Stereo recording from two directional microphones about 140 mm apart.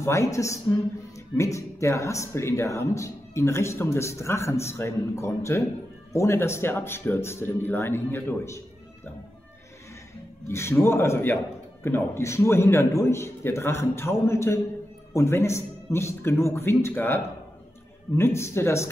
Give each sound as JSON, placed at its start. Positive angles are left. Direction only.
{"t": 0.0, "sound": "speech", "side_deg": 20}
{"t": 10.5, "sound": "speech", "side_deg": 20}